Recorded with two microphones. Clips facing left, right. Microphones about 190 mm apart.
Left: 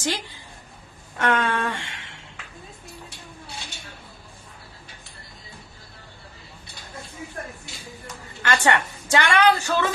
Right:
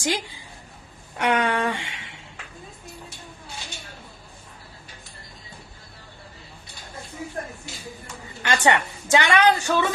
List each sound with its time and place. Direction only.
1.1 s a woman's voice: 15° right (ahead or behind)
8.4 s a woman's voice: 20° right (ahead or behind)